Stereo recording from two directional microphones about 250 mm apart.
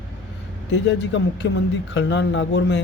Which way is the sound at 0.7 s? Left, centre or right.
Left.